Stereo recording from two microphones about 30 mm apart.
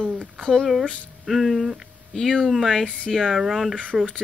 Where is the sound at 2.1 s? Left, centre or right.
Centre.